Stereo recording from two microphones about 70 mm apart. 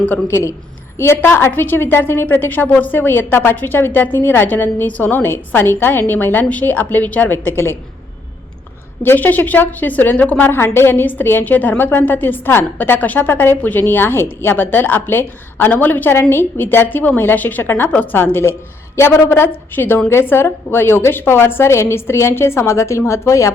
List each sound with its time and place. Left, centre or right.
0.3 s a woman's voice: left
9.0 s a woman's voice: left